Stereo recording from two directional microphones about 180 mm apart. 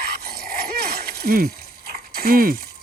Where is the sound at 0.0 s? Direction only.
60° right (ahead or behind).